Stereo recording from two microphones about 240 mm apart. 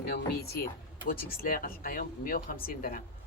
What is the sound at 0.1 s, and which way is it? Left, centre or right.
Speech, left.